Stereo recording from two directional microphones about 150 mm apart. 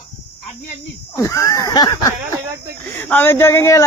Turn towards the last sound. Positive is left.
turn(degrees=20)  # may be behind; listen again after turning